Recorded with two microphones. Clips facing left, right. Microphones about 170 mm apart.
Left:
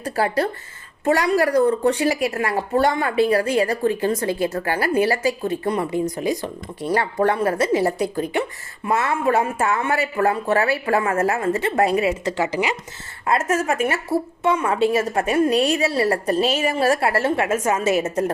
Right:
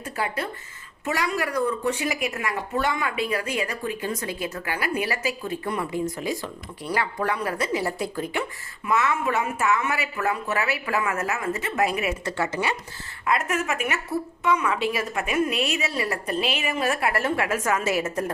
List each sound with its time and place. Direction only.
0.0 s a woman's voice: 35° left (ahead or behind); by 8.4 s 20° left (ahead or behind)
9.0 s a woman's voice: 30° left (ahead or behind)
12.2 s speech: 15° left (ahead or behind)
13.2 s a woman's voice: 35° left (ahead or behind)
14.6 s a woman's voice: 45° left (ahead or behind)
15.3 s a woman's voice: 35° left (ahead or behind)